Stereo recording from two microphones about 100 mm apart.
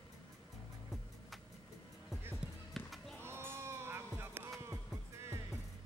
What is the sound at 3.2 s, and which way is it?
Music, 25° right (ahead or behind).